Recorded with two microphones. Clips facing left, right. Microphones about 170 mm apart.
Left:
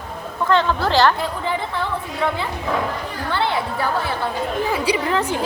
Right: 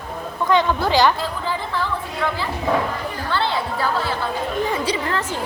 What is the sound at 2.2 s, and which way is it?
Dog, 15° left (ahead or behind).